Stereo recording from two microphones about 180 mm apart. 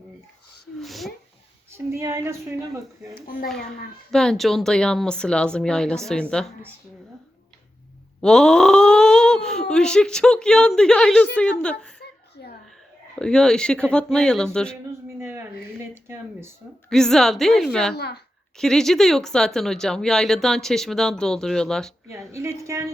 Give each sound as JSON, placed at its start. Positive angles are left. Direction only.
{"t": 0.8, "sound": "a sound", "side_deg": 0}
{"t": 1.7, "sound": "speech", "side_deg": -15}
{"t": 4.1, "sound": "speech", "side_deg": 0}
{"t": 8.2, "sound": "speech", "side_deg": 5}
{"t": 11.9, "sound": "a sound", "side_deg": 65}
{"t": 13.1, "sound": "speech", "side_deg": 5}
{"t": 15.0, "sound": "a sound", "side_deg": -15}
{"t": 16.9, "sound": "speech", "side_deg": 0}
{"t": 17.9, "sound": "a child's voice", "side_deg": 65}
{"t": 18.5, "sound": "speech", "side_deg": 0}
{"t": 22.1, "sound": "speech", "side_deg": -15}